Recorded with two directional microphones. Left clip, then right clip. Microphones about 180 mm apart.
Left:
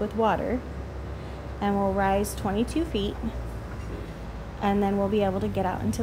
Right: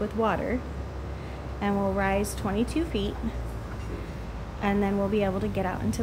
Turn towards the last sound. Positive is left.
turn(degrees=15)  # may be behind; listen again after turning